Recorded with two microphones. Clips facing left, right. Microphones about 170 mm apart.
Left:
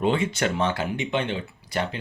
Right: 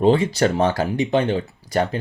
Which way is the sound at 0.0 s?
35° right (ahead or behind).